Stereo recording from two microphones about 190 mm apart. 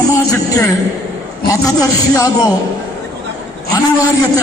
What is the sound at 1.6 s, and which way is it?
Speech, 20° left (ahead or behind).